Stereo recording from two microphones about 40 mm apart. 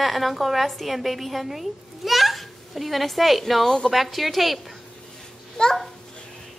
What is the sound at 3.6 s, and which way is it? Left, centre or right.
Speech, centre.